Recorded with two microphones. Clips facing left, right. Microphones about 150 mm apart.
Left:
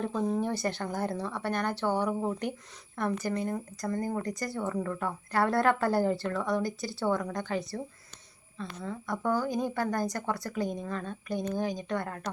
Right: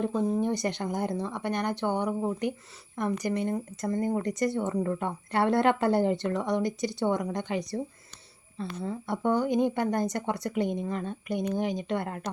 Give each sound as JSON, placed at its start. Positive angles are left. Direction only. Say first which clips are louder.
{"t": 0.0, "sound": "speech", "louder": "right 3 dB", "side_deg": -5}
{"t": 0.3, "sound": "speech", "louder": "right 2 dB", "side_deg": -20}